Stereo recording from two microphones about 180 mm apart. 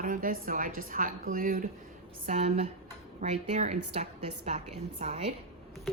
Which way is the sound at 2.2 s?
40° right (ahead or behind).